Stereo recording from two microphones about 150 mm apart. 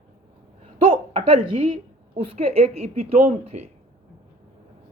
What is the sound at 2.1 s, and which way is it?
Speech, 40° right (ahead or behind).